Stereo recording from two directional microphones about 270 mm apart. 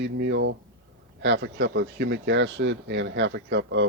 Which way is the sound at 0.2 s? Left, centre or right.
Right.